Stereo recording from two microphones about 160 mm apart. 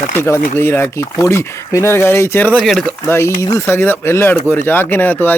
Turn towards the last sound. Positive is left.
turn(degrees=10)  # may be behind; listen again after turning